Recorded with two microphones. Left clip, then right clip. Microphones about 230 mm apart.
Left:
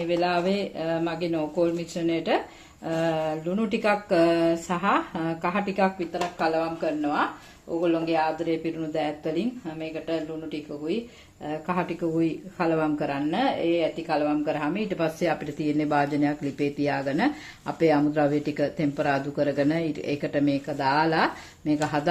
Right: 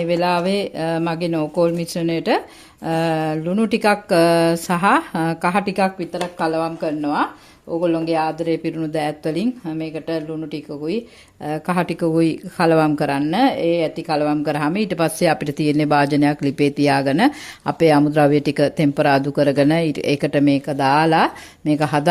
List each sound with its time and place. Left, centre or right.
0.0 s speech: right